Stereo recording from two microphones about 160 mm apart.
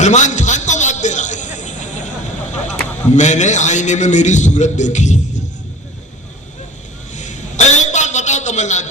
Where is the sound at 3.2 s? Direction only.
45° left (ahead or behind).